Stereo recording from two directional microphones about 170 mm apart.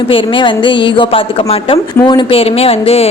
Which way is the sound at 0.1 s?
30° left (ahead or behind).